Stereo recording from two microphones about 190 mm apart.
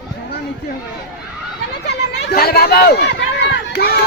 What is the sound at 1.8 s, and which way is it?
Speech, 60° left (ahead or behind).